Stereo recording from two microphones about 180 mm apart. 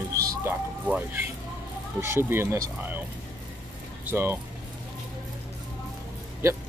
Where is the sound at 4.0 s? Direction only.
10° right (ahead or behind).